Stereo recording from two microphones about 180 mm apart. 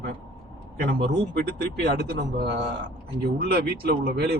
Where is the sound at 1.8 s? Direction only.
65° right (ahead or behind).